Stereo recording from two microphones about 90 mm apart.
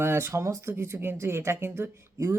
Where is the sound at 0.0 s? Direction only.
30° right (ahead or behind).